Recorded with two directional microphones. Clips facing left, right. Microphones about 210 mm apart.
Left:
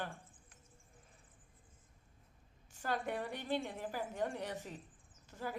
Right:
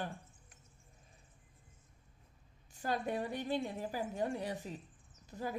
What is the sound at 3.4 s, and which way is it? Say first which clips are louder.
Speech: right 2 dB; 15° right (ahead or behind).